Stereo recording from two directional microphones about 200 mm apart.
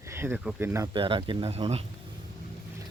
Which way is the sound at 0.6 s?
15° right (ahead or behind).